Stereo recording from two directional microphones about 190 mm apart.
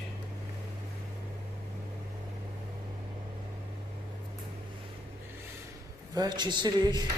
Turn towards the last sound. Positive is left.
turn(degrees=-25)  # may be behind; listen again after turning